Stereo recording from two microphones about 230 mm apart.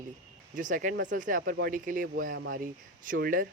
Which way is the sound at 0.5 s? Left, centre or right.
Right.